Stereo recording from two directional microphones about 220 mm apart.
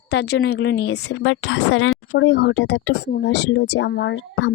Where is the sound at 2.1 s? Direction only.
55° left (ahead or behind).